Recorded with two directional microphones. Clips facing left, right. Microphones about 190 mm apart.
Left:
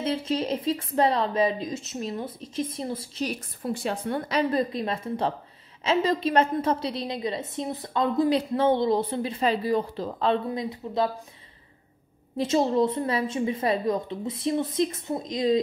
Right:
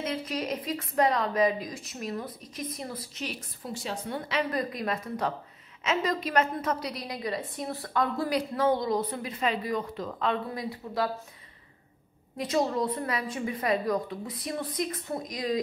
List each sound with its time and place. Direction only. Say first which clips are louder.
0.0 s a woman's voice: left 5 dB; 30° left (ahead or behind)
3.3 s a woman's voice: left 6 dB; 55° left (ahead or behind)
4.4 s a woman's voice: left 5 dB; 25° left (ahead or behind)
12.4 s a woman's voice: left 5 dB; 25° left (ahead or behind)